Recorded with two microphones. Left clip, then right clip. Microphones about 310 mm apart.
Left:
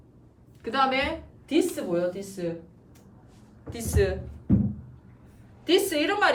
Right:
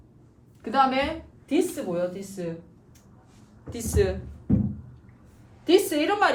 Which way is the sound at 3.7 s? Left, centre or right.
Centre.